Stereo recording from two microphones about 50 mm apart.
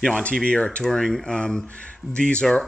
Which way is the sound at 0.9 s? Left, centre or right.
Centre.